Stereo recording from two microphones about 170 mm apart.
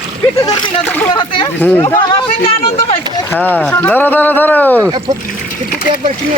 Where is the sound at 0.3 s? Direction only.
25° left (ahead or behind).